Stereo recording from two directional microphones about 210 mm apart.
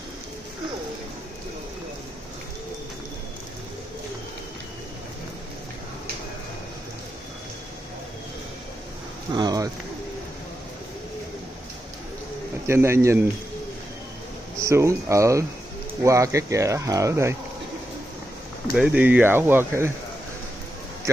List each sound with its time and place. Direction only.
9.3 s a sound: 20° right (ahead or behind)
12.6 s speech: 10° right (ahead or behind)
14.6 s speech: 15° right (ahead or behind)
18.8 s speech: 5° right (ahead or behind)